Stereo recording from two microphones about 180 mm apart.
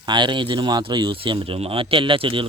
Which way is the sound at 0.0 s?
25° right (ahead or behind).